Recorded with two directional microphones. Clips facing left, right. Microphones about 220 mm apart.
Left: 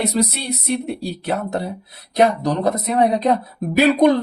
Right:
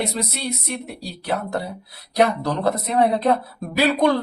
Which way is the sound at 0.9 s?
25° left (ahead or behind).